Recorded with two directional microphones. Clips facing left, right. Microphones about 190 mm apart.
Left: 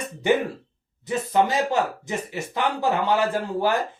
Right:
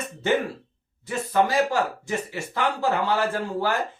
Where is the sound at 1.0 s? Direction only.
20° left (ahead or behind).